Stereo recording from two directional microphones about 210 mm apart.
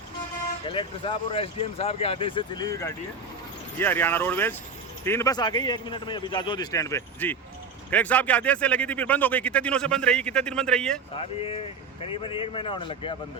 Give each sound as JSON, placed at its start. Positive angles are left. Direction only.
{"t": 0.7, "sound": "speech", "side_deg": 25}
{"t": 3.8, "sound": "a man's voice", "side_deg": 10}
{"t": 11.2, "sound": "speech", "side_deg": 25}